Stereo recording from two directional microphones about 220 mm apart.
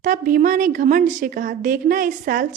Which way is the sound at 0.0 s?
35° right (ahead or behind).